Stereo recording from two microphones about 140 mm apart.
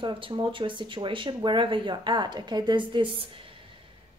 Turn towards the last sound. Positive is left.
turn(degrees=-35)  # may be behind; listen again after turning